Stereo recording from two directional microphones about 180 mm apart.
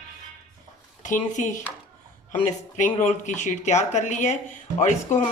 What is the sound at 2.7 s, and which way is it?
Speech, 40° left (ahead or behind).